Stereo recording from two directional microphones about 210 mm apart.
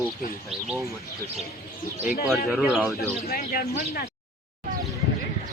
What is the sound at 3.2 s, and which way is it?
Speech, 45° left (ahead or behind).